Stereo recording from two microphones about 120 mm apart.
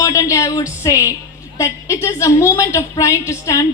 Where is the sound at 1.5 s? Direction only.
25° left (ahead or behind).